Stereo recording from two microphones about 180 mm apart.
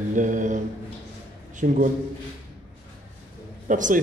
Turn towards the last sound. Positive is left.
turn(degrees=-45)  # may be behind; listen again after turning